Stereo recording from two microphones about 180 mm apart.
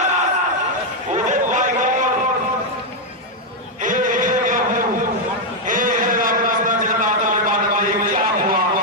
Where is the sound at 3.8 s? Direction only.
45° right (ahead or behind).